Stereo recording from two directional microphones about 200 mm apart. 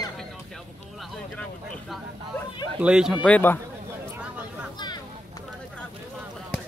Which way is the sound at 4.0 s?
5° right (ahead or behind).